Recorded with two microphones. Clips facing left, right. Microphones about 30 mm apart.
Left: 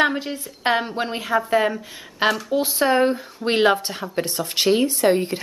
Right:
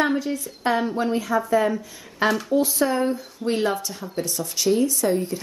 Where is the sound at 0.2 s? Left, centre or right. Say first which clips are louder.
Even; left.